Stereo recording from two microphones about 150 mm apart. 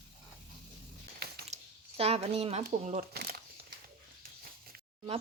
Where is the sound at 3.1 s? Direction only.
90° right.